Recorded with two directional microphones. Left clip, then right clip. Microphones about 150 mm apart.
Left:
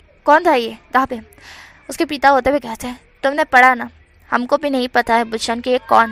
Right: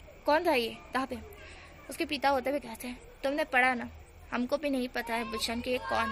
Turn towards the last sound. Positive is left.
turn(degrees=45)  # may be behind; listen again after turning